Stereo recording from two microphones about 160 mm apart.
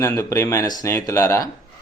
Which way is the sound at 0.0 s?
20° left (ahead or behind).